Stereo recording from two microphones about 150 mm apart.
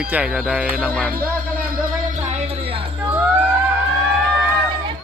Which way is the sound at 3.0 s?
15° right (ahead or behind).